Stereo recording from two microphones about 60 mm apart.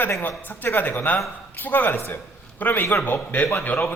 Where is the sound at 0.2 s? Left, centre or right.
Left.